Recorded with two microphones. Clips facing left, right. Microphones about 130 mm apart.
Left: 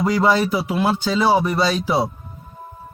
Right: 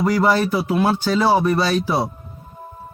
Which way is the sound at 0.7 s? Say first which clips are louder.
Right 3 dB; centre (ahead or behind).